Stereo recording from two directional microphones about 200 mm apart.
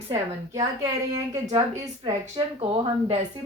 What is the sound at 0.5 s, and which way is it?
A woman's voice, 15° right (ahead or behind).